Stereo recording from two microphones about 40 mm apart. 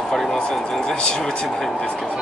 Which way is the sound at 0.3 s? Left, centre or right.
Centre.